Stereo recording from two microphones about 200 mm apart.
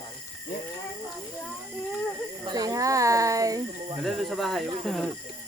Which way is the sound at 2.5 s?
20° right (ahead or behind).